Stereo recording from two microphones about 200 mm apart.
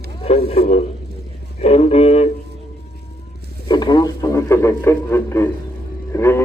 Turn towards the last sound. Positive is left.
turn(degrees=15)  # may be behind; listen again after turning